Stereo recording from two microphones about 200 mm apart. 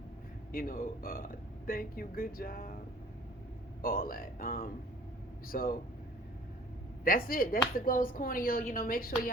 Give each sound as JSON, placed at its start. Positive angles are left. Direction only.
{"t": 0.5, "sound": "speech", "side_deg": 45}
{"t": 3.8, "sound": "speech", "side_deg": 45}
{"t": 7.0, "sound": "speech", "side_deg": 45}